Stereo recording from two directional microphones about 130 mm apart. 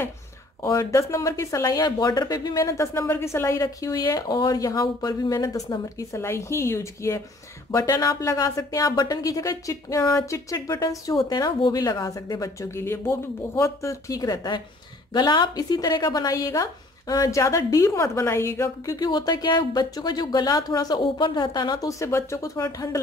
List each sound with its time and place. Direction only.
0.6 s a woman's voice: 25° left (ahead or behind)